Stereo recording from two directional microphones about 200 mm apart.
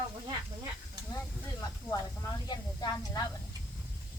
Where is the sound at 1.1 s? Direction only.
15° left (ahead or behind).